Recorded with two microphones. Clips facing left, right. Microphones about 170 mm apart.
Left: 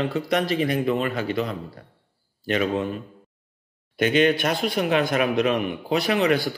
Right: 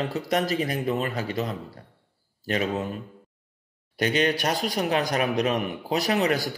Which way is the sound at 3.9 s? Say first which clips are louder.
Left 4 dB; 40° right (ahead or behind).